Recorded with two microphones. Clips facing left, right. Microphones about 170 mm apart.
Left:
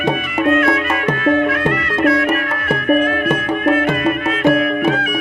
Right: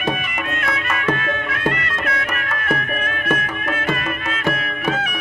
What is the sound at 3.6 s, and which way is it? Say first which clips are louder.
Music: left 11 dB; 30° left (ahead or behind).